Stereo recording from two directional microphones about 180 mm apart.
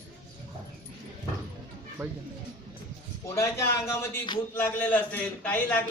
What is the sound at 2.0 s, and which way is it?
Speech, 15° right (ahead or behind).